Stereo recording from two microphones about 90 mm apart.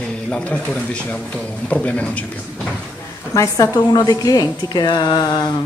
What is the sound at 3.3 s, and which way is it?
A woman's voice, 40° left (ahead or behind).